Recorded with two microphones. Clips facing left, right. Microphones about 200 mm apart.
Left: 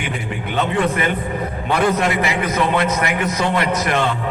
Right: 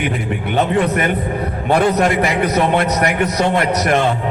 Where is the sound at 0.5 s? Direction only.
45° right (ahead or behind).